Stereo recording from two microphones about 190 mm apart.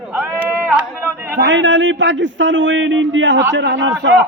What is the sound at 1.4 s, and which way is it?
A man's voice, 75° right (ahead or behind).